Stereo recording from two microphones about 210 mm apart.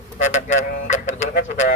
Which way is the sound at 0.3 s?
35° left (ahead or behind).